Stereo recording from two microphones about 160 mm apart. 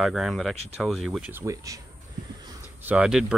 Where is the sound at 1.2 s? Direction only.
20° right (ahead or behind).